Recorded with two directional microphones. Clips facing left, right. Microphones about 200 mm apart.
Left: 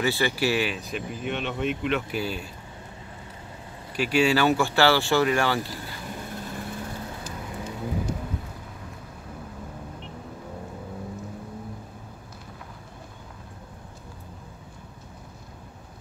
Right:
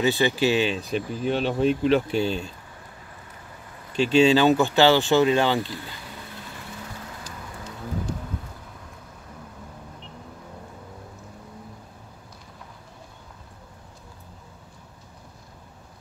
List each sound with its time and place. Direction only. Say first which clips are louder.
0.0 s speech: right 3 dB; 20° right (ahead or behind)
3.9 s speech: right 5 dB; 25° right (ahead or behind)